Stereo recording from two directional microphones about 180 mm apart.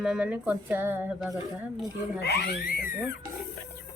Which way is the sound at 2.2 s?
65° left (ahead or behind).